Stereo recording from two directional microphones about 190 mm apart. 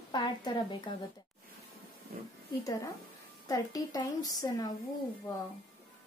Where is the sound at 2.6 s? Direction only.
15° left (ahead or behind).